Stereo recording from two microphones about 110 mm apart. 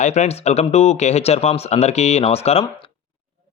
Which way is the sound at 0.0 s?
90° left.